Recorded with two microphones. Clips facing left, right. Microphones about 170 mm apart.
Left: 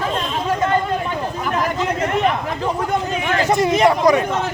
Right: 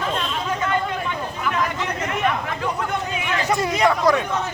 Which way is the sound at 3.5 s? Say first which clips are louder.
Left 4 dB; 25° left (ahead or behind).